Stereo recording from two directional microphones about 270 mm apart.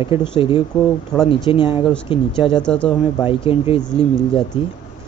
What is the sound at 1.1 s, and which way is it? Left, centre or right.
Speech, centre.